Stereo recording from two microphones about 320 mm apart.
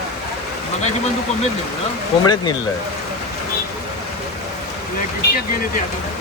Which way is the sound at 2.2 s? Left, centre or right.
Centre.